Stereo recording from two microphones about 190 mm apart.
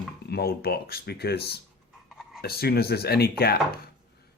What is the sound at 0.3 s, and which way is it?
Speech, 55° left (ahead or behind).